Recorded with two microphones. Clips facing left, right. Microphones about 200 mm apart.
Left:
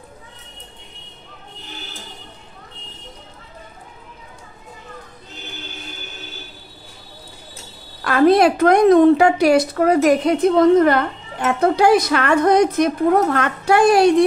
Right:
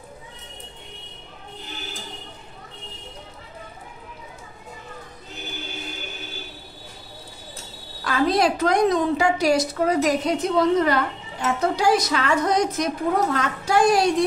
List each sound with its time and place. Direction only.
8.0 s a woman's voice: 60° left (ahead or behind)